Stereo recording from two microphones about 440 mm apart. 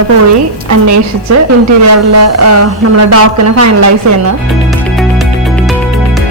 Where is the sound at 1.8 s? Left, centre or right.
Right.